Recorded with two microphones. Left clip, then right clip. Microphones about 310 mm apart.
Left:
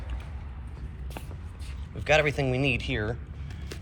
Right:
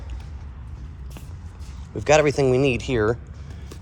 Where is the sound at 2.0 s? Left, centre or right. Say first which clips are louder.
Right 6 dB; centre.